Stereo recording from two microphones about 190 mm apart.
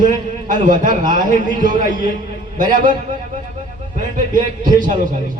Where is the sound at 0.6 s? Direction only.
40° right (ahead or behind).